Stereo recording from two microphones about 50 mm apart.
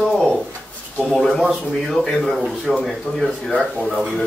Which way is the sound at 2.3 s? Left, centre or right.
Centre.